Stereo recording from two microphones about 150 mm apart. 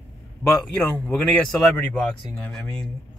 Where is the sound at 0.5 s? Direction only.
5° left (ahead or behind).